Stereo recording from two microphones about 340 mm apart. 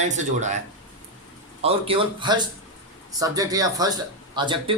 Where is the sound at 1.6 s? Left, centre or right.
Centre.